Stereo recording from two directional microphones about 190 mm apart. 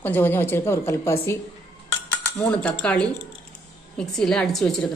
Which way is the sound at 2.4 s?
5° left (ahead or behind).